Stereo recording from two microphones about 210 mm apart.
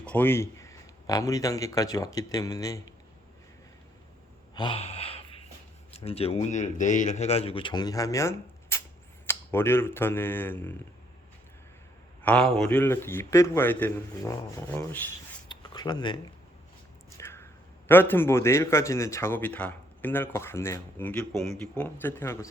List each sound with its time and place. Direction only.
0.0 s speech: 10° left (ahead or behind)
4.5 s gasp: 25° left (ahead or behind)
5.9 s speech: 30° left (ahead or behind); by 10.8 s 10° left (ahead or behind)
12.2 s a man's voice: 5° left (ahead or behind)
15.4 s a sound: 20° left (ahead or behind)
17.8 s a man's voice: 10° left (ahead or behind)